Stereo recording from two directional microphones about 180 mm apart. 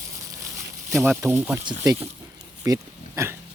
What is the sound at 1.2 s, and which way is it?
Speech, 10° right (ahead or behind).